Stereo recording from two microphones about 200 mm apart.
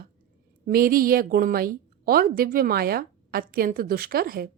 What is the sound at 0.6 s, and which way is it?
A woman's voice, 45° right (ahead or behind).